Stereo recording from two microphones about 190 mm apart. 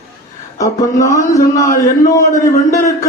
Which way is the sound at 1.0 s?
15° left (ahead or behind).